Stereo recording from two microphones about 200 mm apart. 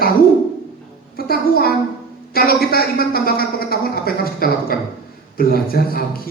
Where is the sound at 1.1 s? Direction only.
50° left (ahead or behind).